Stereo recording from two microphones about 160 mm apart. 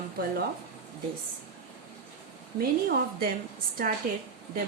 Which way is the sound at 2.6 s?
65° right (ahead or behind).